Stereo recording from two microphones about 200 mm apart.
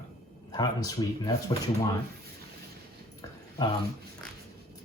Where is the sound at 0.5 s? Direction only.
20° left (ahead or behind).